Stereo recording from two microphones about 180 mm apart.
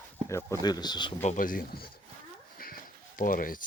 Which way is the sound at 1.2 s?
45° left (ahead or behind).